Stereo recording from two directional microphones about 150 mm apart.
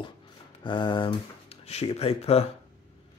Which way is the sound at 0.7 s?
30° left (ahead or behind).